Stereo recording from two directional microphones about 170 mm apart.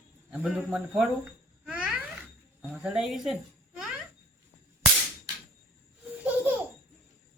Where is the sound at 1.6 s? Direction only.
5° right (ahead or behind).